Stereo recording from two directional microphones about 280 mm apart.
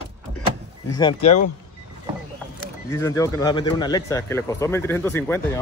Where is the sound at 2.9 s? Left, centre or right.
Centre.